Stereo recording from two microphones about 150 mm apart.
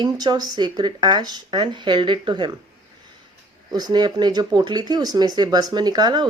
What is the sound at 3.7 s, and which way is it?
Speech, 25° right (ahead or behind).